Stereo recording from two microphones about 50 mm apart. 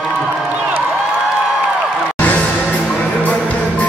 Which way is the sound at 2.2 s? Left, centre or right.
Left.